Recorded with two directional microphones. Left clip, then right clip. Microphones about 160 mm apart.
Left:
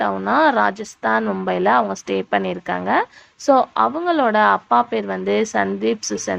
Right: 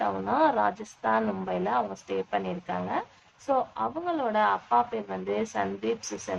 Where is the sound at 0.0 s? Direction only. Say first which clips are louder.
Left 8 dB; 35° left (ahead or behind).